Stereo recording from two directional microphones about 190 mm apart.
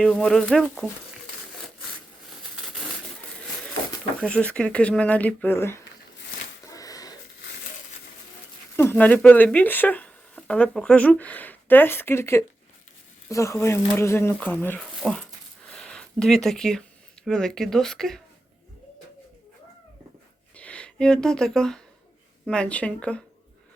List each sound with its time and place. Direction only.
0.0 s speech: 5° left (ahead or behind)
4.2 s speech: 5° left (ahead or behind)
6.7 s a sound: 20° left (ahead or behind)
8.7 s speech: 10° left (ahead or behind)
15.7 s a sound: 5° left (ahead or behind)
17.2 s speech: 5° left (ahead or behind)
20.6 s speech: 5° left (ahead or behind)